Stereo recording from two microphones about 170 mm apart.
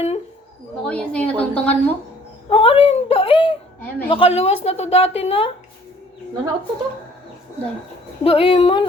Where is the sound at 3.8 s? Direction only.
10° left (ahead or behind).